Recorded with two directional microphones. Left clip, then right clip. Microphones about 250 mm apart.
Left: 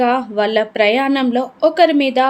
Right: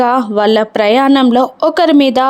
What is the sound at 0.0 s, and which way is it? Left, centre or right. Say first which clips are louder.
A woman's voice: right 5 dB; right.